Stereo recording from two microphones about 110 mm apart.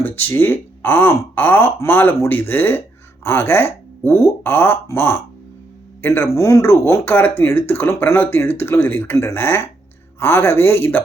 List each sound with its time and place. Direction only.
0.0 s speech: 20° left (ahead or behind)